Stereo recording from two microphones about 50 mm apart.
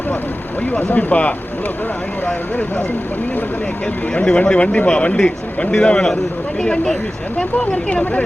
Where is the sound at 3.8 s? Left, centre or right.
Centre.